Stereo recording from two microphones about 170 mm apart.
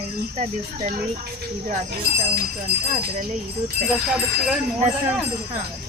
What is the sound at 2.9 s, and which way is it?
Speech, 45° right (ahead or behind).